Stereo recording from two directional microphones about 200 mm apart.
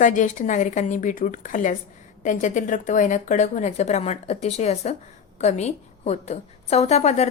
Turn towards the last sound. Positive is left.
turn(degrees=35)  # may be behind; listen again after turning